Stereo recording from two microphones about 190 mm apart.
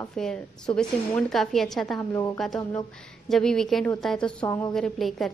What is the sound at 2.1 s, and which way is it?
Speech, 15° left (ahead or behind).